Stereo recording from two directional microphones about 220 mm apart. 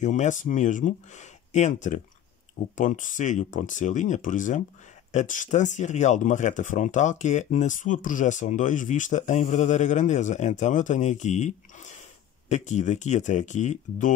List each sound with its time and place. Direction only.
0.0 s speech: 35° left (ahead or behind)